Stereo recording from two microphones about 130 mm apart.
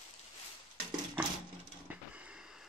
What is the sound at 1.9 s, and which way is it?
Printer, 10° right (ahead or behind).